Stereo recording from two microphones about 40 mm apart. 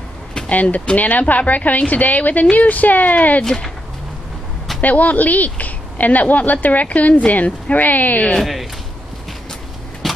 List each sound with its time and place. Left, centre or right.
0.5 s speech: left
4.8 s speech: left
8.4 s speech: centre
10.0 s typewriter: centre